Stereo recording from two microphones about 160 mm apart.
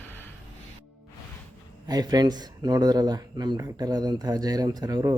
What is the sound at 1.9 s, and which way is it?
Speech, 25° right (ahead or behind).